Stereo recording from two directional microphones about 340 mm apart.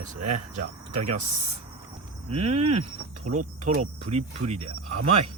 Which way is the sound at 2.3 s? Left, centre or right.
Centre.